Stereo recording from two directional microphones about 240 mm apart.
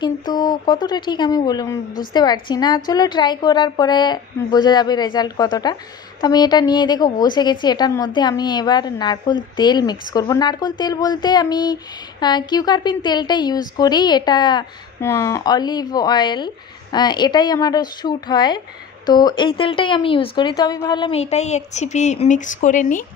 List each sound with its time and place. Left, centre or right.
0.0 s a woman's voice: centre